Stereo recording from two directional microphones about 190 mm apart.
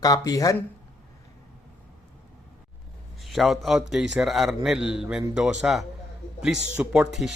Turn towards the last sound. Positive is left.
turn(degrees=-5)  # may be behind; listen again after turning